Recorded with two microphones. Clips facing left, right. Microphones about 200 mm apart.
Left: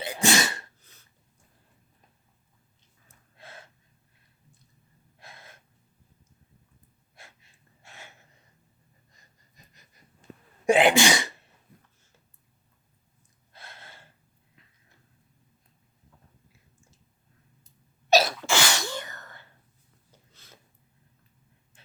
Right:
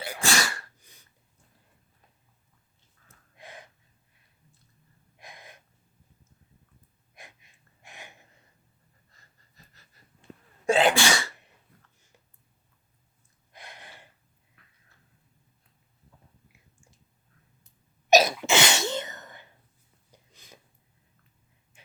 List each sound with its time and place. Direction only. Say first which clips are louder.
0.0 s sneeze: left 4 dB; 20° left (ahead or behind)
0.8 s sneeze: right 1 dB; 15° right (ahead or behind)
3.3 s gasp: right 2 dB; 15° right (ahead or behind)
5.1 s gasp: right 2 dB; 15° right (ahead or behind)
7.2 s gasp: right 2 dB; 15° right (ahead or behind)
9.1 s pant: right 1 dB; 15° left (ahead or behind)
10.7 s sneeze: left 2 dB; 15° left (ahead or behind)
13.5 s gasp: right 1 dB; 15° right (ahead or behind)
18.1 s sneeze: right 2 dB; 15° right (ahead or behind)
20.1 s a sound: right 2 dB; 15° right (ahead or behind)